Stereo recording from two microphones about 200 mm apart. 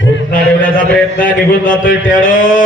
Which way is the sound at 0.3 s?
40° left (ahead or behind).